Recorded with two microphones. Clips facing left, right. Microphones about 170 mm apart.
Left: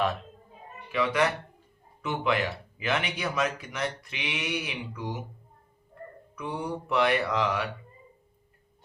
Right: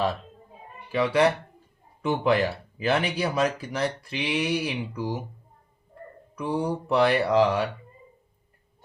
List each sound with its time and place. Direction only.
0.9 s speech: 30° right (ahead or behind)
6.3 s speech: 35° right (ahead or behind)